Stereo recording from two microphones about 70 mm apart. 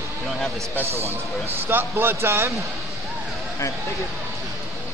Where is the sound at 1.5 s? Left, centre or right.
Right.